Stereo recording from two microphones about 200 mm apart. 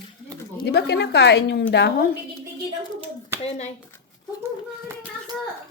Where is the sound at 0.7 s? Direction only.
55° left (ahead or behind).